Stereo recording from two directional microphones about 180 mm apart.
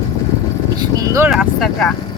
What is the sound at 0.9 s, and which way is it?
Speech, 15° right (ahead or behind).